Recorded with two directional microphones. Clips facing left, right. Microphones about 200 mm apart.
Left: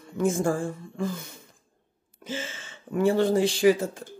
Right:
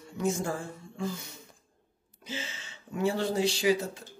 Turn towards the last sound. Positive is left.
turn(degrees=50)  # may be behind; listen again after turning